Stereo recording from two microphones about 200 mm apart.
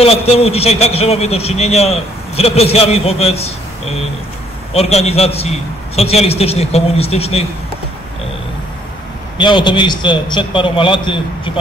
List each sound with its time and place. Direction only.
0.0 s a man's voice: 30° left (ahead or behind)
9.4 s a man's voice: 25° left (ahead or behind)